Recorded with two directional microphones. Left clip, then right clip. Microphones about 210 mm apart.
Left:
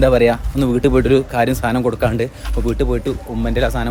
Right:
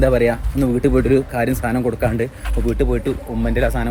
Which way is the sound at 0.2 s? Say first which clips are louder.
Left 3 dB; 20° left (ahead or behind).